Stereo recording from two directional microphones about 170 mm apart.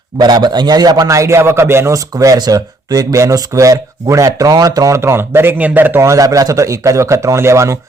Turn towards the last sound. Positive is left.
turn(degrees=-15)  # may be behind; listen again after turning